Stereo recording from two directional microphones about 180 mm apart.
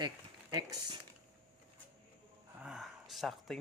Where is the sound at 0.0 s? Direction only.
25° right (ahead or behind).